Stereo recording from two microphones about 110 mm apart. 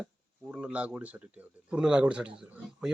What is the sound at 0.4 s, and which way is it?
A man's voice, 10° right (ahead or behind).